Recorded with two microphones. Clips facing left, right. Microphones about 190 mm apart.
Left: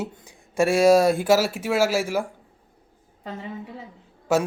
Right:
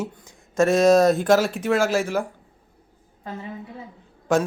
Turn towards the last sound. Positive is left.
turn(degrees=5)  # may be behind; listen again after turning